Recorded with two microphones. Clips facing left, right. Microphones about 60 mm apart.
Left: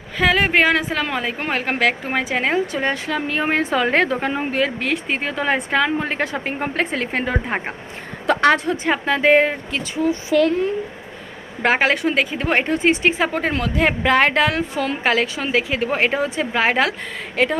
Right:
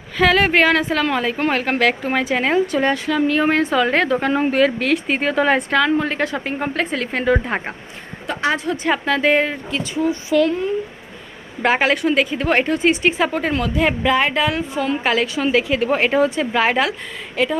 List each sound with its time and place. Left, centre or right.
0.2 s a woman's voice: centre; by 4.3 s left
4.3 s speech: centre
5.7 s a woman's voice: left
8.3 s a sound: left
8.5 s a woman's voice: left
11.6 s a woman's voice: left
12.3 s a woman's voice: left
14.2 s a woman's voice: left
15.0 s a woman's voice: left